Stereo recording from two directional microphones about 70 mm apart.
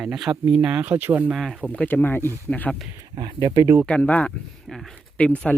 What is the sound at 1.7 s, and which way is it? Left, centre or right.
Speech, left.